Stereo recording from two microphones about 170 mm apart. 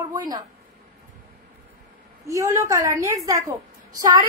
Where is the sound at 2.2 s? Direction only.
20° right (ahead or behind).